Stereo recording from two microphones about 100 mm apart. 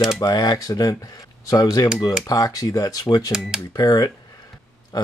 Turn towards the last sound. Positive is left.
turn(degrees=40)  # may be behind; listen again after turning